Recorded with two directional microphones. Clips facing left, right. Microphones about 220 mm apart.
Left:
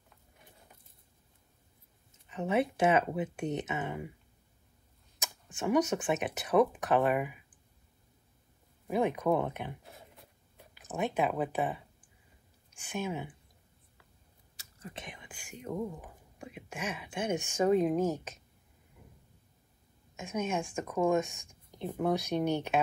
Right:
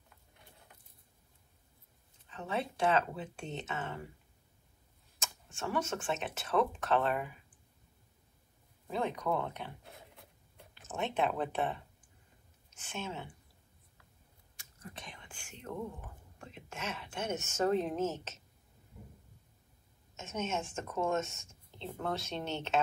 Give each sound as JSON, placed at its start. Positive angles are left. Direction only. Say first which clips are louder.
{"t": 2.2, "sound": "speech", "louder": "left 7 dB", "side_deg": 20}
{"t": 5.2, "sound": "speech", "louder": "left 5 dB", "side_deg": 15}
{"t": 8.8, "sound": "speech", "louder": "left 6 dB", "side_deg": 15}
{"t": 9.8, "sound": "writing", "louder": "left 1 dB", "side_deg": 0}
{"t": 12.7, "sound": "speech", "louder": "left 6 dB", "side_deg": 15}
{"t": 14.8, "sound": "speech", "louder": "left 4 dB", "side_deg": 20}
{"t": 20.2, "sound": "speech", "louder": "left 4 dB", "side_deg": 10}